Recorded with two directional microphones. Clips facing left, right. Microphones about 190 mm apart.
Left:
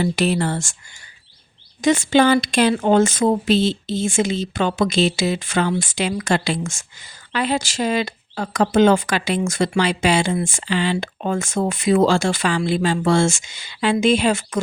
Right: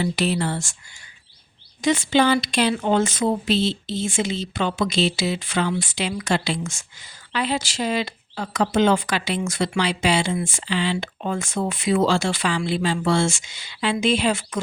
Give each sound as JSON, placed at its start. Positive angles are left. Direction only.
{"t": 0.0, "sound": "speech", "side_deg": 50}
{"t": 1.8, "sound": "speech", "side_deg": 45}